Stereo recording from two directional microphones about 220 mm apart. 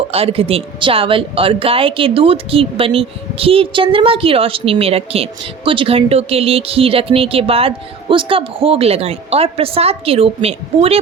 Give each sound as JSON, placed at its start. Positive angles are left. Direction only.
{"t": 0.1, "sound": "speech", "side_deg": -25}